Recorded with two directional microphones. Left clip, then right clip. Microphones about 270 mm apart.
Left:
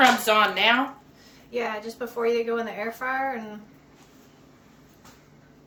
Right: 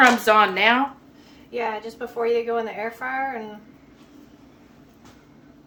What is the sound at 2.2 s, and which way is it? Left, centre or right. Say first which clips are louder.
Speech: right 2 dB; centre.